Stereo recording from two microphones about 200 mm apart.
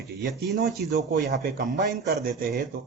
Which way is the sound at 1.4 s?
40° right (ahead or behind).